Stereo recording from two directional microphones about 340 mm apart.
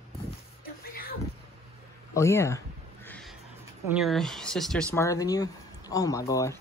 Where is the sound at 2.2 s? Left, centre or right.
Centre.